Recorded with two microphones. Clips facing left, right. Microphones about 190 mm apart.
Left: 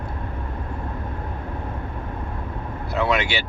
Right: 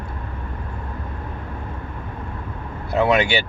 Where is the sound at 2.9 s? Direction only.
30° right (ahead or behind).